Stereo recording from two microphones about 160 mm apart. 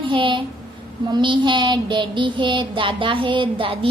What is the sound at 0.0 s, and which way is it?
A woman's voice, 30° right (ahead or behind).